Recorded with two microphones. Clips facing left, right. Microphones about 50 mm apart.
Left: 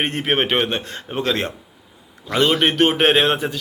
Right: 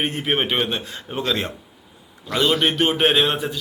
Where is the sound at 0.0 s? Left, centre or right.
Left.